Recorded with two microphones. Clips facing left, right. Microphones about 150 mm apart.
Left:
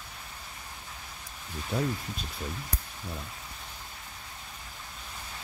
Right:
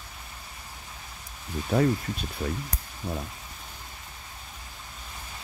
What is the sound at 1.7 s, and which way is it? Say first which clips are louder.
Speech: right 7 dB; 60° right (ahead or behind).